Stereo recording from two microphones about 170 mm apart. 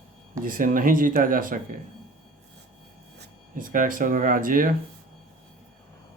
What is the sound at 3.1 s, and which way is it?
Speech, 55° right (ahead or behind).